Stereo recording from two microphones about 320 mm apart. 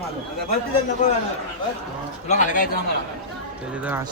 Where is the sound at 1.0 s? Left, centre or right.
Left.